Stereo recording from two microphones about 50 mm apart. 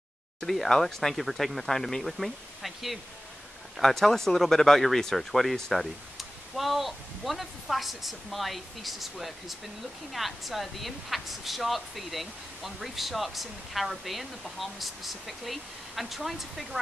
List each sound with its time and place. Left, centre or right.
0.4 s a woman's voice: centre